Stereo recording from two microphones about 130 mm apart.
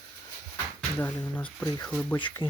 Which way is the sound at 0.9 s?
15° left (ahead or behind).